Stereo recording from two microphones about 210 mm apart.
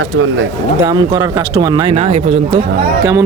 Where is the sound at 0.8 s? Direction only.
20° right (ahead or behind).